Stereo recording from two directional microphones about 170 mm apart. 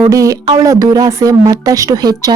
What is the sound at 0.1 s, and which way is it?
Speech, 20° right (ahead or behind).